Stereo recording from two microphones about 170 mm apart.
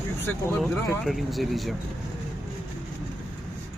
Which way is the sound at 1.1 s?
Centre (ahead or behind).